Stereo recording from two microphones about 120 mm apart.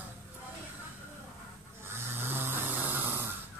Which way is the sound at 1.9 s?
20° right (ahead or behind).